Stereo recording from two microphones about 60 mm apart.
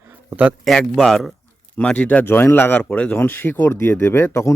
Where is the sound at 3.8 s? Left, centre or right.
Left.